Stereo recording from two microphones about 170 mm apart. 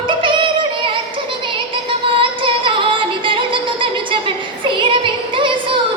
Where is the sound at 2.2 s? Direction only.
30° right (ahead or behind).